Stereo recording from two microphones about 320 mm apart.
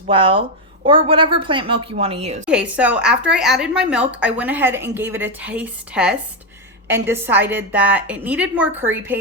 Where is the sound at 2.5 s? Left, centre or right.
Centre.